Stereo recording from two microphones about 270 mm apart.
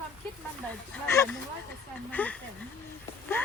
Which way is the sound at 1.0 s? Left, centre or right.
Centre.